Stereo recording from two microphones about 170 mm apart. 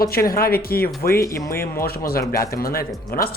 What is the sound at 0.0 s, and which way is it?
Speech, 60° left (ahead or behind).